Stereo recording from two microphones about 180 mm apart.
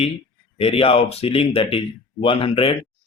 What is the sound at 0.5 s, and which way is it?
Speech, 30° left (ahead or behind).